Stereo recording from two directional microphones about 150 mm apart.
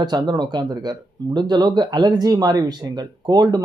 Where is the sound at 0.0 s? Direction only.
30° right (ahead or behind).